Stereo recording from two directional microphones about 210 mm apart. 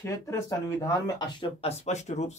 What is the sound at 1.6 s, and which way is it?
Speech, 30° left (ahead or behind).